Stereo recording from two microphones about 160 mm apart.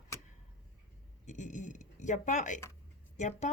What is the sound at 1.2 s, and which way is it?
Speech, 50° left (ahead or behind).